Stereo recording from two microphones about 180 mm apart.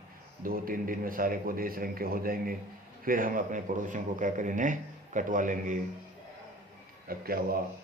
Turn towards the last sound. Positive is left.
turn(degrees=-55)  # may be behind; listen again after turning